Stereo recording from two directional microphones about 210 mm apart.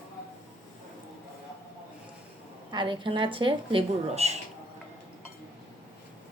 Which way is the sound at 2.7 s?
20° right (ahead or behind).